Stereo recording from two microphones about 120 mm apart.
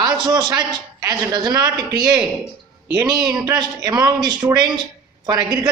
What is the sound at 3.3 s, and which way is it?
A man's voice, 35° right (ahead or behind).